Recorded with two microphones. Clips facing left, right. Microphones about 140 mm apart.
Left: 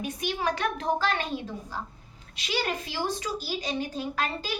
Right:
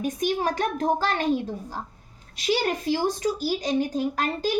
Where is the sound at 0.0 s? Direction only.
40° right (ahead or behind).